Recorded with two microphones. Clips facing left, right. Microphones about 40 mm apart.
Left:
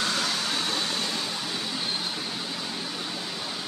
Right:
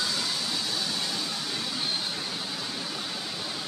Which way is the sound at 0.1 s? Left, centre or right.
Left.